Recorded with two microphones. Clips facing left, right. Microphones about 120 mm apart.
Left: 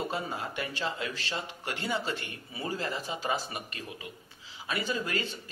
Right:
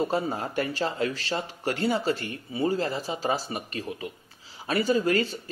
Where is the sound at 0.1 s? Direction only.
40° right (ahead or behind).